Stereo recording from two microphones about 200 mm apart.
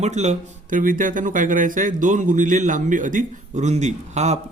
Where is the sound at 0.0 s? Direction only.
35° right (ahead or behind).